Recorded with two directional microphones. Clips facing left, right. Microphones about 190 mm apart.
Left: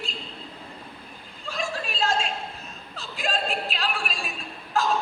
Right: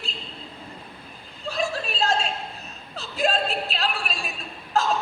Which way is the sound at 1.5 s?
40° right (ahead or behind).